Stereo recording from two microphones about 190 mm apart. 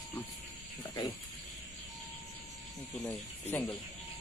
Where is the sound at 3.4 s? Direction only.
15° left (ahead or behind).